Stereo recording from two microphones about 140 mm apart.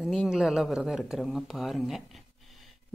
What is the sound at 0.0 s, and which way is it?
Speech, 5° right (ahead or behind).